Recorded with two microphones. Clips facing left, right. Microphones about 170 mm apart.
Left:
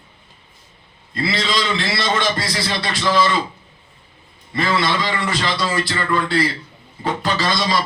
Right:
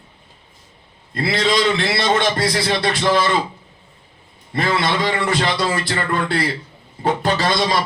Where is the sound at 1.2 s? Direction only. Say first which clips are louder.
Right 4 dB; 55° right (ahead or behind).